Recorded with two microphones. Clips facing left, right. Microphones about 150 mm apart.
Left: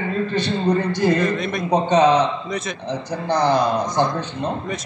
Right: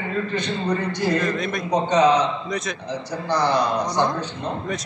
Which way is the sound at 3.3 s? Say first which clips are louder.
Left 3 dB; 50° left (ahead or behind).